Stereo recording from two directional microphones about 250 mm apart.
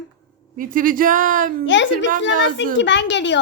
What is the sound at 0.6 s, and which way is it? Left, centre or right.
Speech, right.